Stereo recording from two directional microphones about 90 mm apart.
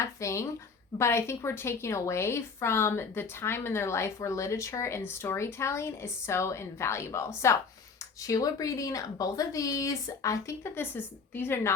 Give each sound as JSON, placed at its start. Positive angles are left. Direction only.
{"t": 0.0, "sound": "a woman's voice", "side_deg": 35}
{"t": 8.3, "sound": "a woman's voice", "side_deg": 40}
{"t": 10.8, "sound": "a woman's voice", "side_deg": 25}